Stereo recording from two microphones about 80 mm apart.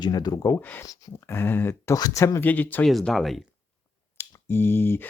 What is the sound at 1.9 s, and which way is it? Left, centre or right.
Speech, left.